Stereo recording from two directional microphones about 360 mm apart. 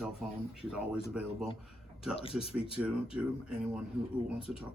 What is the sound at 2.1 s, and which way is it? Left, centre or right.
Speech, centre.